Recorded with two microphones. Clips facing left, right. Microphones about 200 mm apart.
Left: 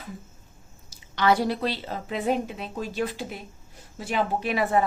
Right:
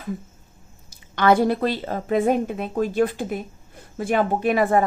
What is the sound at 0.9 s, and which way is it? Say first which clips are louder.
A woman's voice: right 4 dB; 55° right (ahead or behind).